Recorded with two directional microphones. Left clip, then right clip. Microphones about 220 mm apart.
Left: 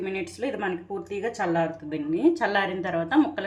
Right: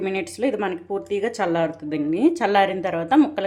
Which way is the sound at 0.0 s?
35° right (ahead or behind).